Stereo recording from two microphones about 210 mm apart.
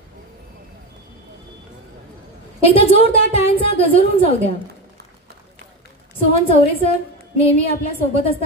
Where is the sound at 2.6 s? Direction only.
25° left (ahead or behind).